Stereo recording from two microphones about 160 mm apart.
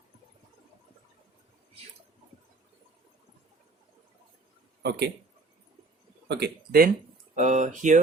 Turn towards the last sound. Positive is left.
turn(degrees=-50)  # may be behind; listen again after turning